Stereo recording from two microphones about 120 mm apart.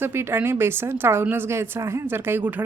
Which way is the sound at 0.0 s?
20° right (ahead or behind).